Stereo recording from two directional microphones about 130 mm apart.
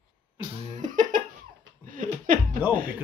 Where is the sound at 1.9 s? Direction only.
90° right.